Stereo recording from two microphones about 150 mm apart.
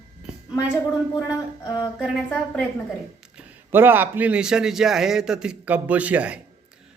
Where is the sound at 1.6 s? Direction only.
25° left (ahead or behind).